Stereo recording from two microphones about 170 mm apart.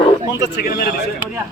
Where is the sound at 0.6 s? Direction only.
60° left (ahead or behind).